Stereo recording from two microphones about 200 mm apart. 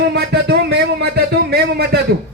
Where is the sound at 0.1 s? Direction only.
55° right (ahead or behind).